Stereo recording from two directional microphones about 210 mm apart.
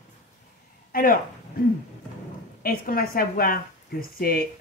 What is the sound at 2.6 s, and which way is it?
A woman's voice, 45° left (ahead or behind).